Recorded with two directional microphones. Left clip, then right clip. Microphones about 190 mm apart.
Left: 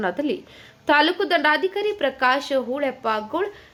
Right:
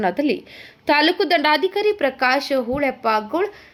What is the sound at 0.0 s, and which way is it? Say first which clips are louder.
A woman's voice: right 4 dB; 15° right (ahead or behind).